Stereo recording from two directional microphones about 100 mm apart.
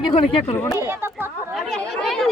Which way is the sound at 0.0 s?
55° left (ahead or behind).